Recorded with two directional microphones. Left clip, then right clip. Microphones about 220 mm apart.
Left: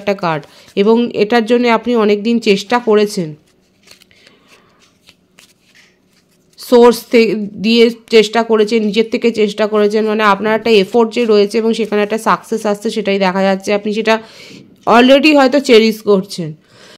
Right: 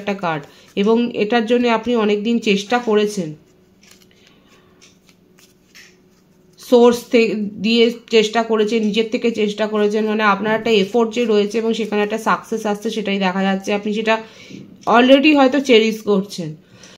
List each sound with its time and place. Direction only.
0.0 s speech: 45° left (ahead or behind)
6.6 s speech: 45° left (ahead or behind)